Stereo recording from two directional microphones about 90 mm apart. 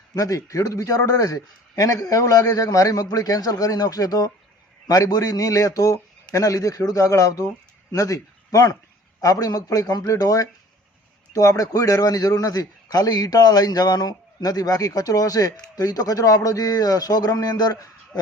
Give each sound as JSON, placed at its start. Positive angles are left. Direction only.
{"t": 0.1, "sound": "a man's voice", "side_deg": 40}